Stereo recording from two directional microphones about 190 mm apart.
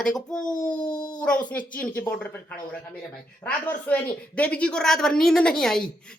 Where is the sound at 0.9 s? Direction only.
20° left (ahead or behind).